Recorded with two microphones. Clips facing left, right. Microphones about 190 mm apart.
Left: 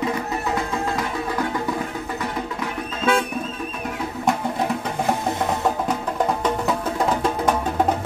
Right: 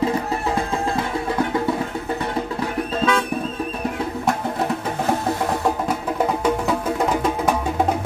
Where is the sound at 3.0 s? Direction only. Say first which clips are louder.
Left 1 dB; 35° right (ahead or behind).